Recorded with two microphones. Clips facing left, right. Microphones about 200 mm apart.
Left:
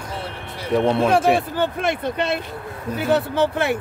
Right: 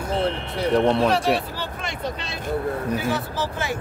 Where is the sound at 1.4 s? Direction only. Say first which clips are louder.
Left 7 dB; 55° left (ahead or behind).